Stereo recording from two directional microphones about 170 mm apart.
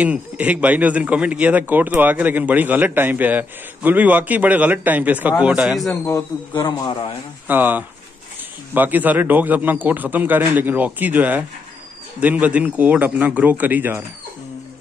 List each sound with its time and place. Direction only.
0.0 s a man's voice: 10° right (ahead or behind)
6.0 s speech: 25° left (ahead or behind)
7.4 s a man's voice: 10° right (ahead or behind)